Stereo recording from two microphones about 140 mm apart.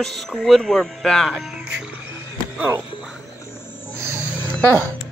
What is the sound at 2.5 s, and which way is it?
Speech, 10° right (ahead or behind).